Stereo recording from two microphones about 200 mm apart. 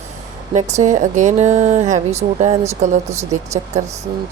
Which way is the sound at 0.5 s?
35° right (ahead or behind).